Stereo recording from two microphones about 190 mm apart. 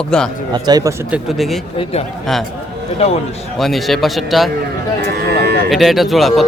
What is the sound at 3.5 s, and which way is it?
Speech, centre (ahead or behind).